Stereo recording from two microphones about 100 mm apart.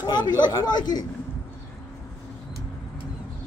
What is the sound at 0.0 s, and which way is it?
A man's voice, 45° left (ahead or behind).